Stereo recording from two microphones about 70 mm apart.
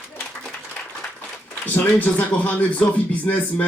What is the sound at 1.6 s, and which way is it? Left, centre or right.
Speech, left.